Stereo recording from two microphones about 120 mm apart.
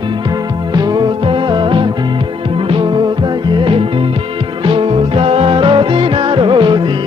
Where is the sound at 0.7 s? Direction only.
35° right (ahead or behind).